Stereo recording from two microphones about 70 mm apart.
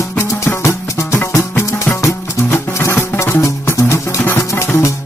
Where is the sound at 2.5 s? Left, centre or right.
Left.